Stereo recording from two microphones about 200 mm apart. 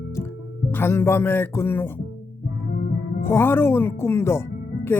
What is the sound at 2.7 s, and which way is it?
Music, 45° left (ahead or behind).